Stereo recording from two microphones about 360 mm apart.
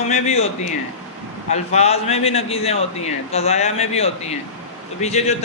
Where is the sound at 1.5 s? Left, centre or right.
Centre.